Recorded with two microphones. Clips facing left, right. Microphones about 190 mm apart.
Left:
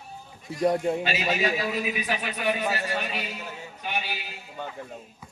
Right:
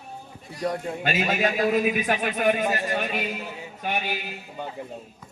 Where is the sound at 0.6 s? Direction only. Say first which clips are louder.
Left 5 dB; 30° left (ahead or behind).